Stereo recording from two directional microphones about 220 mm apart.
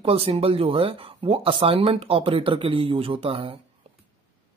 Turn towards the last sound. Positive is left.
turn(degrees=-25)  # may be behind; listen again after turning